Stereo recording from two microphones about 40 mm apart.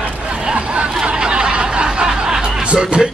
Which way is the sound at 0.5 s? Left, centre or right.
Right.